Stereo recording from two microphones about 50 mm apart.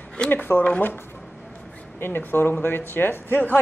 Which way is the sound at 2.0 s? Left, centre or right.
Left.